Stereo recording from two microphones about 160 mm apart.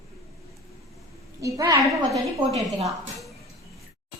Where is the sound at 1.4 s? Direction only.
20° right (ahead or behind).